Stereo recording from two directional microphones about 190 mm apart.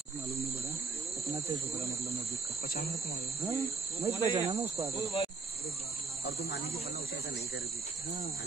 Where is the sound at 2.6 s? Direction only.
50° left (ahead or behind).